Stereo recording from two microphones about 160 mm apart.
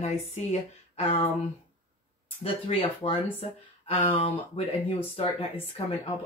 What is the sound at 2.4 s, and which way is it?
Speech, 35° left (ahead or behind).